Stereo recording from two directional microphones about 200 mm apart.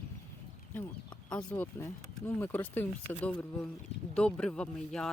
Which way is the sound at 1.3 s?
5° left (ahead or behind).